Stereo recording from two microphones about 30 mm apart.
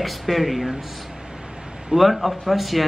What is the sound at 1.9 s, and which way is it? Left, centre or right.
Speech, centre.